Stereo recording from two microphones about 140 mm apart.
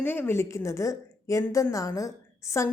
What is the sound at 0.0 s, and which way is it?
A woman's voice, 15° left (ahead or behind).